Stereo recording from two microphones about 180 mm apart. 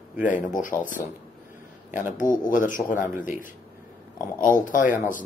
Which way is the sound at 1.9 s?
45° left (ahead or behind).